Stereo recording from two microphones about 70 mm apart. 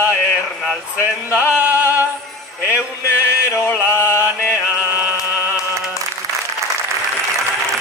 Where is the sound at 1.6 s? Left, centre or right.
Right.